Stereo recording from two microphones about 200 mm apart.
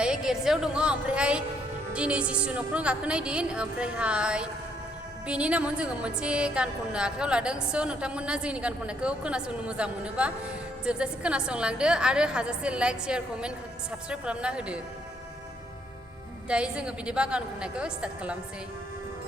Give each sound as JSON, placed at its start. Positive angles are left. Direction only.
{"t": 0.0, "sound": "a woman's voice", "side_deg": -5}
{"t": 16.5, "sound": "a woman's voice", "side_deg": -5}